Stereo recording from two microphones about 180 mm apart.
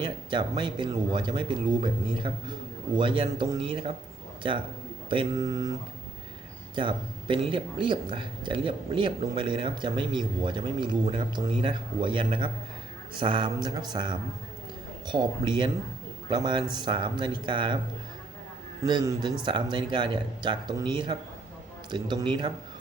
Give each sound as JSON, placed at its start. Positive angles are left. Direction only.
{"t": 0.0, "sound": "speech", "side_deg": -25}
{"t": 6.7, "sound": "speech", "side_deg": -25}
{"t": 18.8, "sound": "speech", "side_deg": -20}